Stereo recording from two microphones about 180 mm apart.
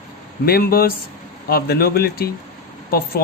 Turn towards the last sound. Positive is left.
turn(degrees=60)  # may be behind; listen again after turning